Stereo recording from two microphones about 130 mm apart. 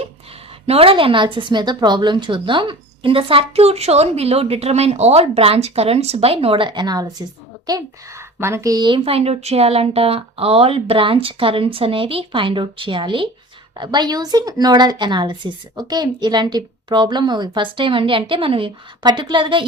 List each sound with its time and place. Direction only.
0.7 s a woman's voice: 45° right (ahead or behind); by 7.1 s 30° right (ahead or behind)
7.7 s a woman's voice: 20° right (ahead or behind)
9.0 s a woman's voice: 50° right (ahead or behind)